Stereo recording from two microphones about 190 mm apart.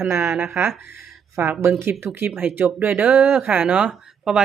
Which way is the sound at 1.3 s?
15° right (ahead or behind).